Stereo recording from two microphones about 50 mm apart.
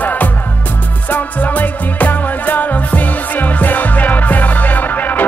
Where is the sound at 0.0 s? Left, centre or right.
Left.